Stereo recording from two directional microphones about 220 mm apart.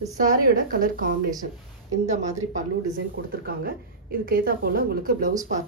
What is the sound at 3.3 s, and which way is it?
A woman's voice, 40° right (ahead or behind).